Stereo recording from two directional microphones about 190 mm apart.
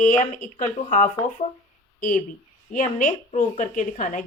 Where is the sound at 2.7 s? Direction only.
40° left (ahead or behind).